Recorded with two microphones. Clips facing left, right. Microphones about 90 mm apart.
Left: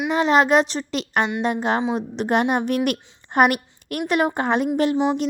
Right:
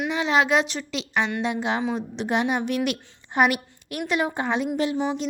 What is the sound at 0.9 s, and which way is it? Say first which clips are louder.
A woman's voice: left 3 dB; 55° left (ahead or behind).